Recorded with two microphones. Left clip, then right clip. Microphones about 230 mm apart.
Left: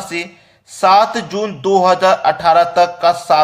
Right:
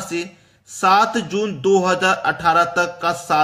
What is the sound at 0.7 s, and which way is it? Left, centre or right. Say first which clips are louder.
Speech: left 4 dB; centre.